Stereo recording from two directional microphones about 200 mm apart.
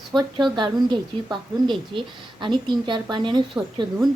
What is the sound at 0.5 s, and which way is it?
Speech, 25° right (ahead or behind).